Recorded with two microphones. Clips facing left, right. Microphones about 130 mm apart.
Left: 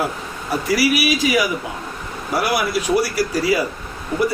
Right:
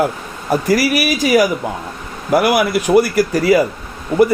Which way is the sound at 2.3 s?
55° right (ahead or behind).